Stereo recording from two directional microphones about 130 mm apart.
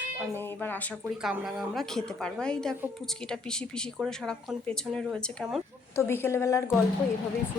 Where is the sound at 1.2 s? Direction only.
5° right (ahead or behind).